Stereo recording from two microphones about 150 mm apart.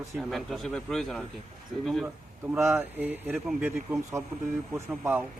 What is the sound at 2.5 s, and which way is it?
Speech, 15° right (ahead or behind).